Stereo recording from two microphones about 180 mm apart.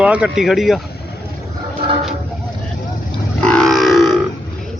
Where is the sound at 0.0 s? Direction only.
5° right (ahead or behind).